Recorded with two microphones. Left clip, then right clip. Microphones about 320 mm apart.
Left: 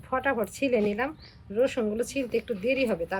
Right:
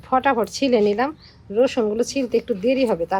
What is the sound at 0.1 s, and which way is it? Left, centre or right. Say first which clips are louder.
Speech: right 9 dB; right.